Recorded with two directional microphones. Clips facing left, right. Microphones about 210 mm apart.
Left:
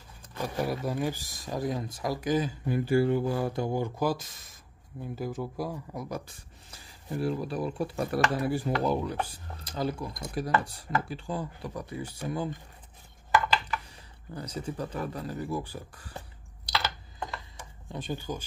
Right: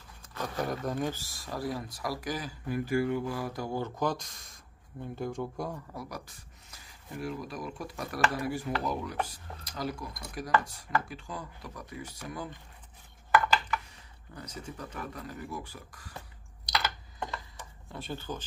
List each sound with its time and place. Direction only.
0.3 s speech: 10° left (ahead or behind); by 3.7 s 25° left (ahead or behind)
3.7 s speech: 10° left (ahead or behind)
5.9 s speech: 25° left (ahead or behind)
14.3 s speech: 35° left (ahead or behind)
17.9 s speech: 15° left (ahead or behind)